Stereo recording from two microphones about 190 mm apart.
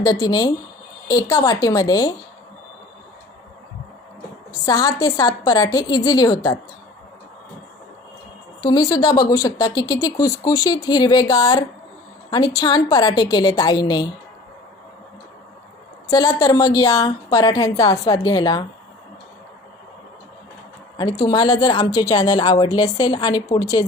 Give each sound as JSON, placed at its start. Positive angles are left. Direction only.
{"t": 0.0, "sound": "speech", "side_deg": 20}
{"t": 4.6, "sound": "speech", "side_deg": 20}
{"t": 8.6, "sound": "speech", "side_deg": 20}
{"t": 16.0, "sound": "speech", "side_deg": 20}
{"t": 21.0, "sound": "speech", "side_deg": 20}